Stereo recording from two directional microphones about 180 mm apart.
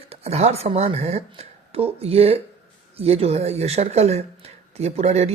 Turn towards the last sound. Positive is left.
turn(degrees=-35)  # may be behind; listen again after turning